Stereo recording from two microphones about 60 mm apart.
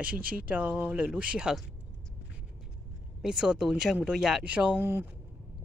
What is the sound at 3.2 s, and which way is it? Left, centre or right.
Speech, centre.